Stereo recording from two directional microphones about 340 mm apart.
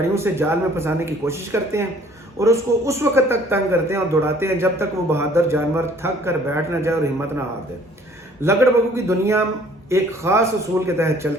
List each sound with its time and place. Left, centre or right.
0.1 s a man's voice: centre
8.4 s a man's voice: centre